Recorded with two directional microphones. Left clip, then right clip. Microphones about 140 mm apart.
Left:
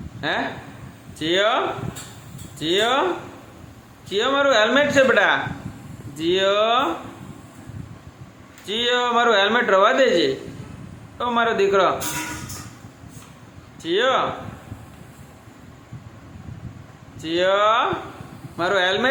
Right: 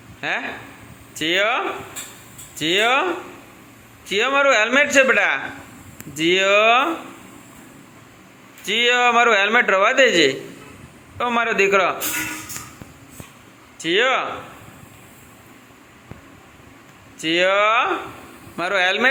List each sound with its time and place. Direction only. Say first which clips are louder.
0.2 s a man's voice: even; 25° right (ahead or behind)
4.1 s a man's voice: right 2 dB; 20° right (ahead or behind)
8.6 s a man's voice: right 4 dB; 25° right (ahead or behind)
13.7 s a man's voice: right 1 dB; 20° right (ahead or behind)
17.2 s a man's voice: right 2 dB; 20° right (ahead or behind)